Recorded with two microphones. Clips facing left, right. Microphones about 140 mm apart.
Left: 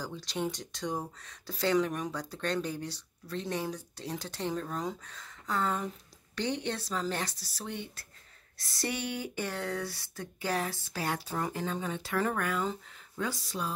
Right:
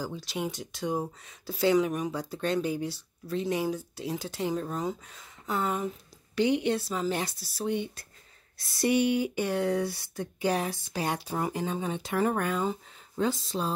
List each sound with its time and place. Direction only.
0.0 s speech: 5° right (ahead or behind); by 13.7 s 25° right (ahead or behind)